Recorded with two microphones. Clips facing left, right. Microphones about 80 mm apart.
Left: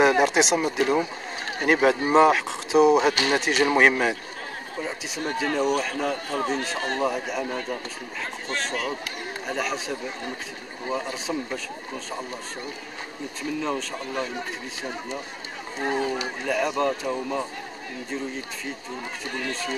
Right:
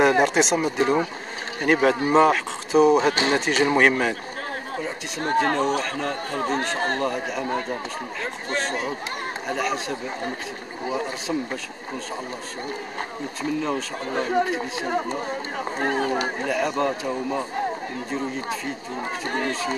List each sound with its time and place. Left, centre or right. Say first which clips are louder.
0.0 s speech: right 1 dB; centre
5.2 s speech: right 5 dB; right
5.9 s speech: even; centre
6.5 s speech: right 3 dB; right
7.0 s speech: even; centre
9.5 s speech: right 2 dB; centre
13.4 s speech: right 2 dB; centre
14.0 s speech: right 7 dB; right
16.4 s speech: left 2 dB; centre
19.2 s speech: right 5 dB; right